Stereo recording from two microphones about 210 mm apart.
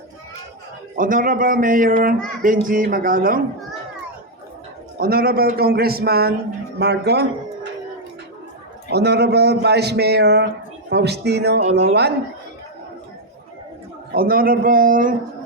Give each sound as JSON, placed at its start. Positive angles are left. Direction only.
{"t": 0.9, "sound": "speech", "side_deg": -40}
{"t": 4.9, "sound": "a man's voice", "side_deg": -45}
{"t": 8.9, "sound": "a man's voice", "side_deg": -50}
{"t": 14.1, "sound": "a man's voice", "side_deg": -45}